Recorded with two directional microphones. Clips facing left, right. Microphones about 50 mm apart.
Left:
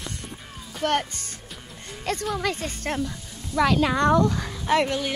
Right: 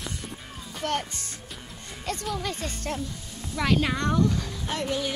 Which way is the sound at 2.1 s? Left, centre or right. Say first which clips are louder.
Left 4 dB; left.